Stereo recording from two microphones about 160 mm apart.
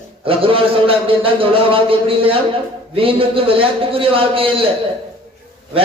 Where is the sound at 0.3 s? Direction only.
35° right (ahead or behind).